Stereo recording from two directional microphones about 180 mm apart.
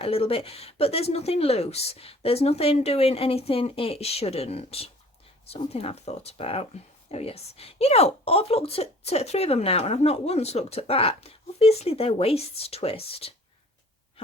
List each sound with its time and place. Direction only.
0.0 s speech: 30° left (ahead or behind)